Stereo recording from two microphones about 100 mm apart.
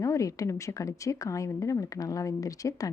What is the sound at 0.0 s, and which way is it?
Speech, 30° left (ahead or behind).